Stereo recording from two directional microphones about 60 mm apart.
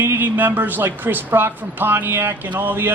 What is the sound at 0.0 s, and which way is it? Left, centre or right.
A man's voice, right.